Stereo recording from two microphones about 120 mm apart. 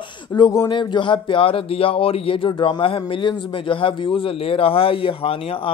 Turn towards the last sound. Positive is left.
turn(degrees=50)  # may be behind; listen again after turning